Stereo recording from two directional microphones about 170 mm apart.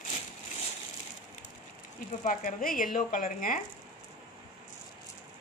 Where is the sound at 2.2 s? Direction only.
55° left (ahead or behind).